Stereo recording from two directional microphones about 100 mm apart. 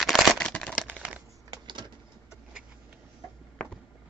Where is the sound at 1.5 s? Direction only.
50° right (ahead or behind).